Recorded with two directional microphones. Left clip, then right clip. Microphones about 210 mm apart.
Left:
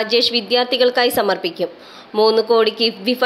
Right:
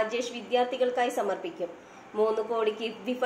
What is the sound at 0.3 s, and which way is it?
A woman's voice, 50° left (ahead or behind).